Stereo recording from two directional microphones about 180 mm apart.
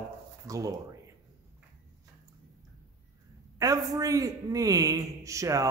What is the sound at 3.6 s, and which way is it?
A man's voice, 20° right (ahead or behind).